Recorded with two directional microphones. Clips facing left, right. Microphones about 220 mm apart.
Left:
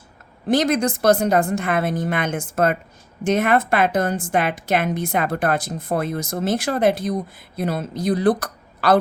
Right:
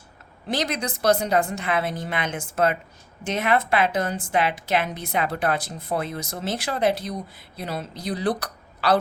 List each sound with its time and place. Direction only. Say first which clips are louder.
0.4 s a woman's voice: left 8 dB; 50° left (ahead or behind)